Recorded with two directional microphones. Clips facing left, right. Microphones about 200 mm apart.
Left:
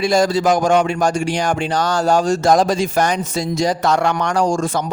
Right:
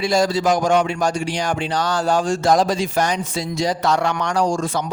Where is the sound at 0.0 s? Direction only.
50° left (ahead or behind).